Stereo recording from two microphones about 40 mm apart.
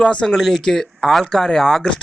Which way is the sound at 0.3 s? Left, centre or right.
Centre.